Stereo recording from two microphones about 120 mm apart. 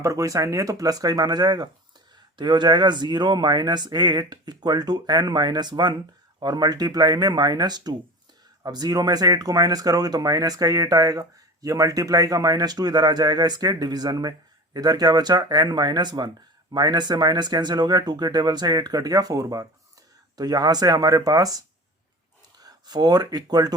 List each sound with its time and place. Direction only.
0.0 s speech: 25° right (ahead or behind)
22.6 s speech: 35° right (ahead or behind)